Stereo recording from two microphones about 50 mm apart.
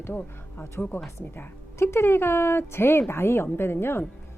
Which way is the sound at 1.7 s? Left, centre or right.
Left.